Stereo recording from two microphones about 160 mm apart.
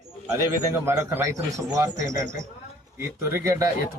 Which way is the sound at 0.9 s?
15° right (ahead or behind).